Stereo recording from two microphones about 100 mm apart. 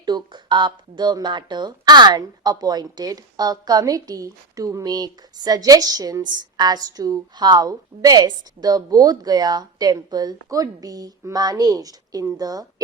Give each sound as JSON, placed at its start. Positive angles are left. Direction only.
{"t": 0.0, "sound": "speech", "side_deg": -45}